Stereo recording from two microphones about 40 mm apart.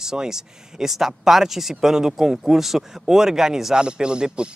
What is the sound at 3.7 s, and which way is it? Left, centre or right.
Speech, right.